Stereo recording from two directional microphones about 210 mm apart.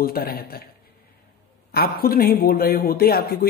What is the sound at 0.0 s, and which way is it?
Speech, 45° left (ahead or behind).